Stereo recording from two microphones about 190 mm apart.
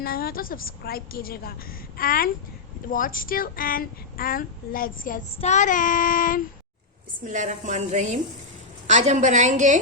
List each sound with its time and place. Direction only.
0.0 s a woman's voice: 50° left (ahead or behind)
7.2 s a woman's voice: 40° right (ahead or behind)